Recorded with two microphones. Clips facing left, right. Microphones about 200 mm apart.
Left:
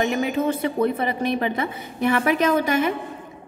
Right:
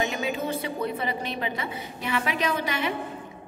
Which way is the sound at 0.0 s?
55° left (ahead or behind).